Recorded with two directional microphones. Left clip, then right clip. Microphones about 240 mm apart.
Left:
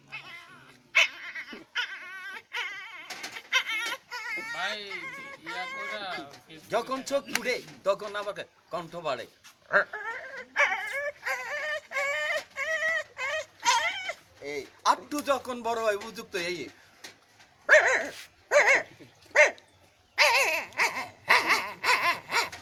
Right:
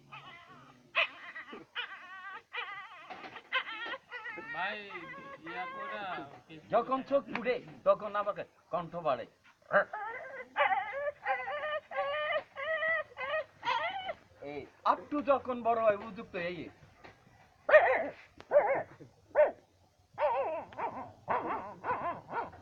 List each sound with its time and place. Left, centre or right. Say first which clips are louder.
0.1 s cat: left 7 dB; left
0.9 s dog: left 8 dB; left
6.7 s speech: left 1 dB; left
9.6 s whimper: left 4 dB; left
14.8 s speech: left 3 dB; left
17.7 s dog: left 3 dB; left
18.4 s dog: left 6 dB; left